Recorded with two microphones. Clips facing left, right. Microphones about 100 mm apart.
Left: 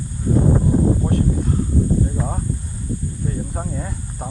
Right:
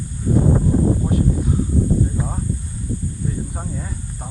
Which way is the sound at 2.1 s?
Centre (ahead or behind).